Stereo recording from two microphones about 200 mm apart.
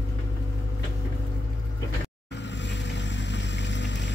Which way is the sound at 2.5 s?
65° left (ahead or behind).